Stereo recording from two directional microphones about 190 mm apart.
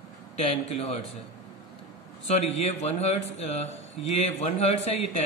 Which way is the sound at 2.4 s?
35° left (ahead or behind).